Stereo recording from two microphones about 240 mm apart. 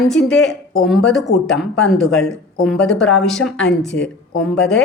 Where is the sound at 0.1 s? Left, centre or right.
Centre.